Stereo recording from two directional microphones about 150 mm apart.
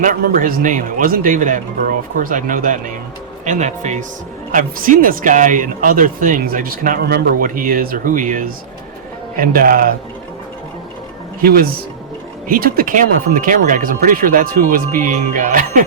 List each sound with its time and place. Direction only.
0.0 s speech: 65° right (ahead or behind)
3.4 s speech: 50° right (ahead or behind)
4.5 s speech: 65° right (ahead or behind)
9.3 s speech: 75° right (ahead or behind)
11.4 s speech: 85° right; by 15.8 s 60° right (ahead or behind)